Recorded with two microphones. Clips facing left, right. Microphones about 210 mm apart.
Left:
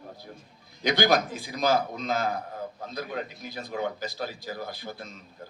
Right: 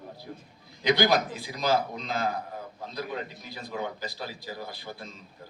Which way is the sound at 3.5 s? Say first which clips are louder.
Left 3 dB; 45° left (ahead or behind).